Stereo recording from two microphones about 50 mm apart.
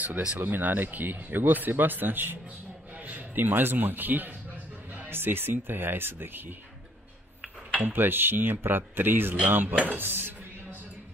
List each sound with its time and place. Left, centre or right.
0.4 s a man's voice: right
7.8 s speech: right